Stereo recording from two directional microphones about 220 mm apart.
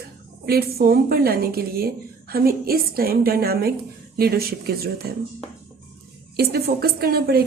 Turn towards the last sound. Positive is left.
turn(degrees=-45)  # may be behind; listen again after turning